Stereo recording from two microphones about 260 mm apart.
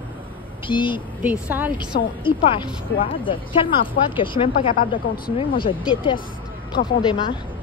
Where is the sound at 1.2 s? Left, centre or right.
Centre.